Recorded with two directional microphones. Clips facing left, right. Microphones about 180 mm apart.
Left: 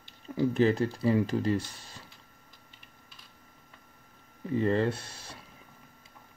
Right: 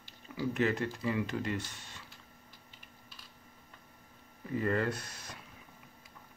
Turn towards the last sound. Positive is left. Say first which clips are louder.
# left 1 dB
turn(degrees=30)  # may be behind; listen again after turning